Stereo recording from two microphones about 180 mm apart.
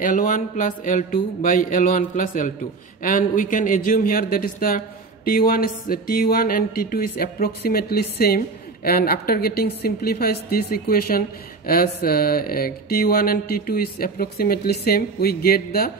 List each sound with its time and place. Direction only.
0.0 s speech: 50° left (ahead or behind)